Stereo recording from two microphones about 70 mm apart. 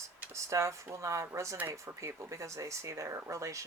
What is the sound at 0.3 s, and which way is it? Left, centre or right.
Speech, right.